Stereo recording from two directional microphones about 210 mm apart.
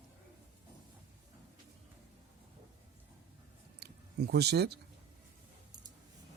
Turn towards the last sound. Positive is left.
turn(degrees=-50)  # may be behind; listen again after turning